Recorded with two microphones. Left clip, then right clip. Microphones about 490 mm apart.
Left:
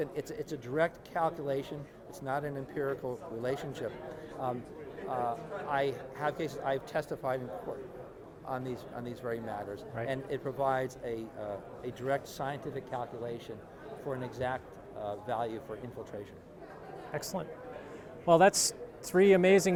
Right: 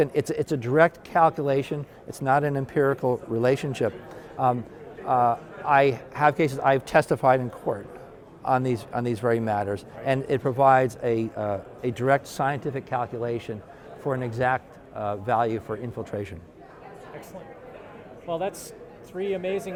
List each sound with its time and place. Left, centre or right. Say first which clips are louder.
0.0 s a man's voice: right 13 dB; right
18.3 s speech: left 6 dB; left